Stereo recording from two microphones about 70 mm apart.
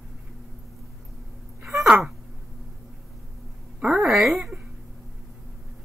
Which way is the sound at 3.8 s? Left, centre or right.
Centre.